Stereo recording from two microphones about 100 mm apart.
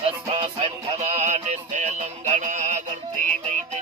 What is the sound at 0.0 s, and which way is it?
Music, 75° right (ahead or behind).